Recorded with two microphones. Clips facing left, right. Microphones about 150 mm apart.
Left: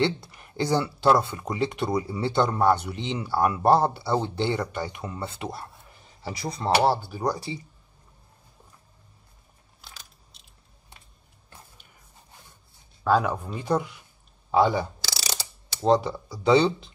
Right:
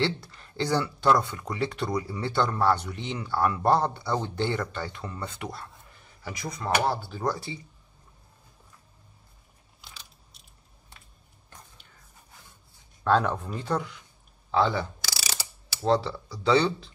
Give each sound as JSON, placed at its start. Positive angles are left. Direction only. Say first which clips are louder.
{"t": 0.0, "sound": "speech", "louder": "left 3 dB", "side_deg": 20}
{"t": 6.2, "sound": "speech", "louder": "left 4 dB", "side_deg": 35}
{"t": 7.0, "sound": "speech", "louder": "left 2 dB", "side_deg": 15}
{"t": 11.5, "sound": "a sound", "louder": "left 1 dB", "side_deg": 15}
{"t": 13.0, "sound": "speech", "louder": "left 1 dB", "side_deg": 10}